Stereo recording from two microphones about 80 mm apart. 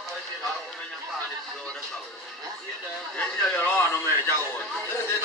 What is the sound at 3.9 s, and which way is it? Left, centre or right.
Music, left.